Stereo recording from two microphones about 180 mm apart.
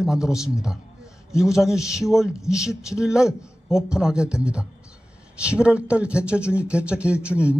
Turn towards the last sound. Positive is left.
turn(degrees=-5)  # may be behind; listen again after turning